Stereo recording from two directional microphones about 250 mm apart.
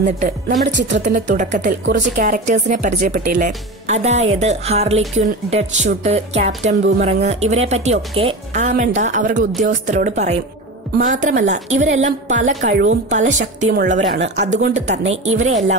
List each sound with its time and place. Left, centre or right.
0.0 s speech: right
13.9 s speech: right
14.5 s speech: right